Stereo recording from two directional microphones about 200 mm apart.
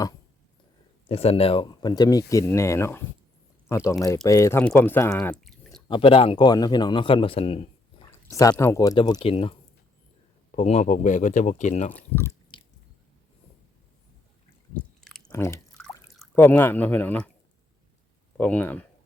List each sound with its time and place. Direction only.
1.0 s speech: 30° left (ahead or behind); by 3.0 s 15° left (ahead or behind)
4.0 s speech: 15° left (ahead or behind); by 5.8 s centre (ahead or behind)
5.9 s a man's voice: 25° left (ahead or behind)
8.3 s a man's voice: 15° left (ahead or behind); by 11.9 s 35° left (ahead or behind)
11.9 s speech: 10° left (ahead or behind)
15.3 s speech: 15° left (ahead or behind)
18.3 s speech: 10° left (ahead or behind)